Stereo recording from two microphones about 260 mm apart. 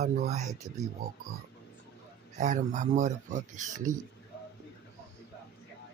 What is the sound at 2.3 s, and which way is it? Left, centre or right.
Speech, right.